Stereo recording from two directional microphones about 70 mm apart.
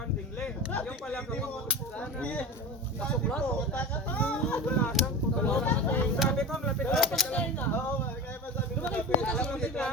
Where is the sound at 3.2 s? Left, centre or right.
Centre.